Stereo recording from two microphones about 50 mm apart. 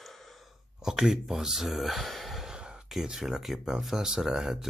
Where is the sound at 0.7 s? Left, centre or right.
Centre.